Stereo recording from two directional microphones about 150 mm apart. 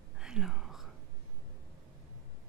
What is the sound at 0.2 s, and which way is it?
Whispering, 5° right (ahead or behind).